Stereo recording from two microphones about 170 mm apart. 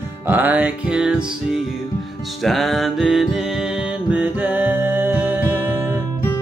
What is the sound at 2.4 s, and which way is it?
Music, centre (ahead or behind).